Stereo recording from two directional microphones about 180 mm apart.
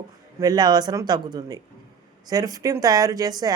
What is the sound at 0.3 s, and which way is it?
Speech, 20° right (ahead or behind).